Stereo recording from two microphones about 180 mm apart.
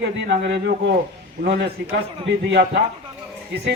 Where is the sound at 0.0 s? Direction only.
70° right (ahead or behind).